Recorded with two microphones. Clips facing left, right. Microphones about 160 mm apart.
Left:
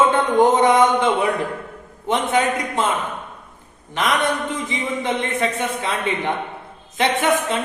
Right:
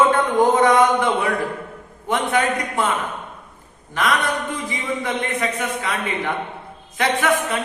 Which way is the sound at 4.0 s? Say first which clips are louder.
Left 1 dB; 20° left (ahead or behind).